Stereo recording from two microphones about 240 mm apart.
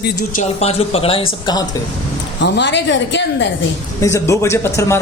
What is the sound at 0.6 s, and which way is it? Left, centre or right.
Speech, left.